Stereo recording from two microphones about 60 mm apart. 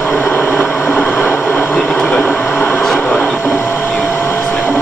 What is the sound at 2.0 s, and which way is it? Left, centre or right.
Vehicle, left.